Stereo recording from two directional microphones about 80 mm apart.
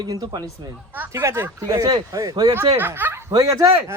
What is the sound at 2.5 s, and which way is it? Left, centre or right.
Speech, right.